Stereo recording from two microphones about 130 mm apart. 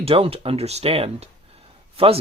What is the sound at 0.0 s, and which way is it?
Speech, 50° right (ahead or behind).